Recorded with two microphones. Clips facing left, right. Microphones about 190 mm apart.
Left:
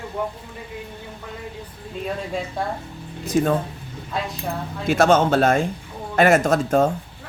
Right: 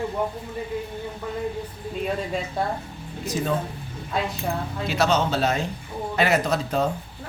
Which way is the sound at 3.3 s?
60° left (ahead or behind).